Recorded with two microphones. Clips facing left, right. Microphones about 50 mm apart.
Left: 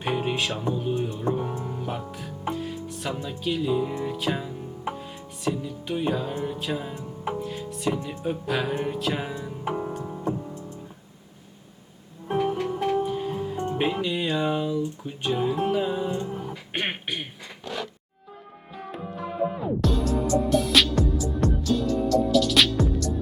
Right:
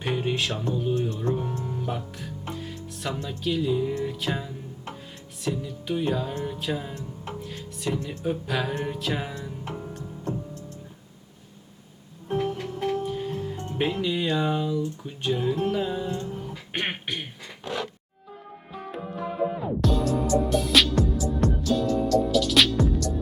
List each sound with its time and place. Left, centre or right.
0.0 s music: centre
0.7 s speech: centre
2.1 s music: centre
6.9 s music: centre
12.3 s music: centre
16.7 s beatboxing: centre
18.8 s music: centre